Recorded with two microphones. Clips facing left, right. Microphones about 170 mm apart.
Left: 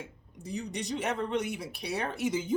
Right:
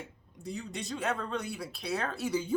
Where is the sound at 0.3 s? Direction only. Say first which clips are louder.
Left 2 dB; 20° left (ahead or behind).